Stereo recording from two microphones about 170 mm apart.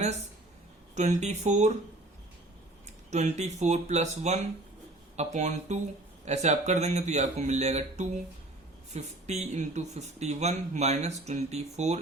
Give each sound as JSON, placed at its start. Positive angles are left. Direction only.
{"t": 0.9, "sound": "speech", "side_deg": -45}
{"t": 3.1, "sound": "speech", "side_deg": -40}